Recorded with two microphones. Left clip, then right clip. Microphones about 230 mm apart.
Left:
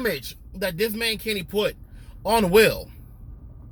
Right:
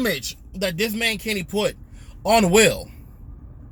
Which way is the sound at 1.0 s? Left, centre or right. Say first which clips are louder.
Right 2 dB; centre.